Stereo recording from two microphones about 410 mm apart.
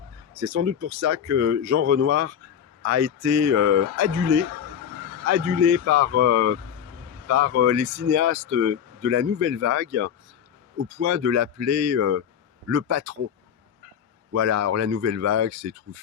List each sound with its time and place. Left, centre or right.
0.3 s speech: right
5.8 s speech: right
14.3 s speech: right